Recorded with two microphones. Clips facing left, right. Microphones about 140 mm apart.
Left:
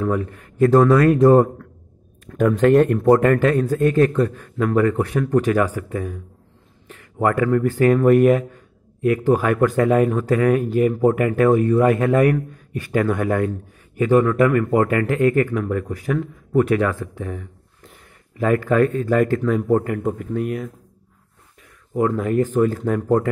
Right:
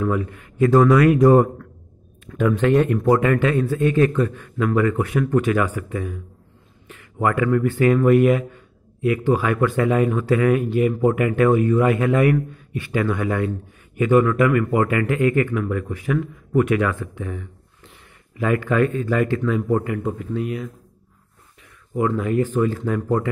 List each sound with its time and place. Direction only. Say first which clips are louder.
0.0 s speech: left 1 dB; 40° left (ahead or behind)
2.2 s speech: left 3 dB; 40° left (ahead or behind)
13.9 s speech: left 1 dB; 35° left (ahead or behind)
21.9 s speech: left 1 dB; 45° left (ahead or behind)